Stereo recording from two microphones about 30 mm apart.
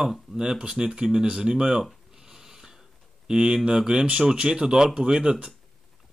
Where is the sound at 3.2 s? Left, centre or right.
Right.